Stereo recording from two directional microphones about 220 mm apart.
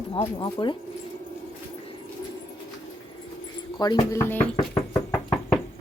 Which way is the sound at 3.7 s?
20° left (ahead or behind).